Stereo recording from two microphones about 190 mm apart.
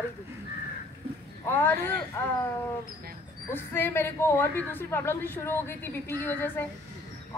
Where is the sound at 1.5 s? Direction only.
10° left (ahead or behind).